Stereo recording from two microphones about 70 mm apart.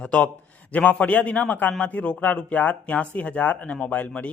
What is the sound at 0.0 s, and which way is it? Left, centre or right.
Speech, centre.